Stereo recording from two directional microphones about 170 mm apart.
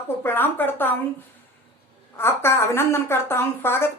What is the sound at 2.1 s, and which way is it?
Speech, 15° left (ahead or behind).